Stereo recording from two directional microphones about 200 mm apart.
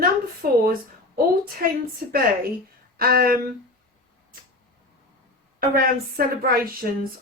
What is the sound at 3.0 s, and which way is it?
Speech, 50° right (ahead or behind).